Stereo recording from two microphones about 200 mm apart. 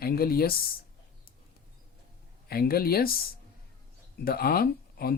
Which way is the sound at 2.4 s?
50° left (ahead or behind).